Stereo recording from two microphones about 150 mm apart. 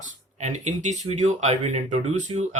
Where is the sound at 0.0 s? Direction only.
55° right (ahead or behind).